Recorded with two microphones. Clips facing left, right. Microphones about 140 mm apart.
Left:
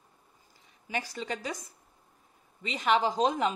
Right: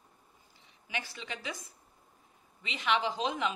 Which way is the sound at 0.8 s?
40° left (ahead or behind).